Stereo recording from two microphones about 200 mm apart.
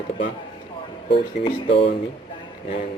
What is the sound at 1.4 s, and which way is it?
Speech, 25° left (ahead or behind).